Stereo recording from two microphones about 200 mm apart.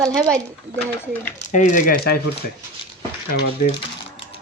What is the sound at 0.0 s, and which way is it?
Speech, centre (ahead or behind).